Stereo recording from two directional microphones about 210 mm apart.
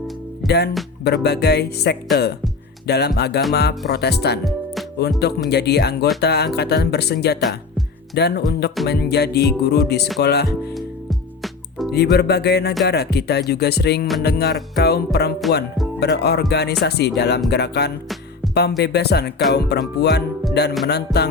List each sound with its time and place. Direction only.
0.4 s music: 50° left (ahead or behind)
1.0 s speech: 50° left (ahead or behind)
2.8 s music: 50° left (ahead or behind)
3.2 s speech: 50° left (ahead or behind)
4.4 s music: centre (ahead or behind)
5.2 s speech: 50° left (ahead or behind)
10.8 s music: centre (ahead or behind)
11.9 s speech: 50° left (ahead or behind)
18.4 s music: centre (ahead or behind)
18.8 s speech: 50° left (ahead or behind)
20.5 s music: 50° left (ahead or behind)
20.8 s speech: 50° left (ahead or behind)